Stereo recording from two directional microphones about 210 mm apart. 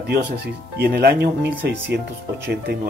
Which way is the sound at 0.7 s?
50° right (ahead or behind).